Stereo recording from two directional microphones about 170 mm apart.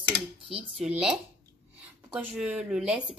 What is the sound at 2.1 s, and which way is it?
Speech, 10° right (ahead or behind).